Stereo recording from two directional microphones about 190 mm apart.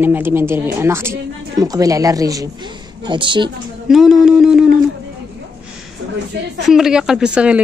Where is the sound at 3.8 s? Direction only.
Centre (ahead or behind).